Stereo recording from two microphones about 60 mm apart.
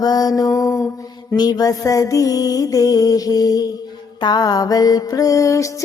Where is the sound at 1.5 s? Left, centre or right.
Left.